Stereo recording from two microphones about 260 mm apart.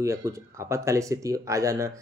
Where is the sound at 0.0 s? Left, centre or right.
Centre.